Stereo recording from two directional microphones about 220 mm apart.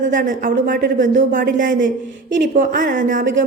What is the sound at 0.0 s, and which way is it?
Speech, 35° right (ahead or behind).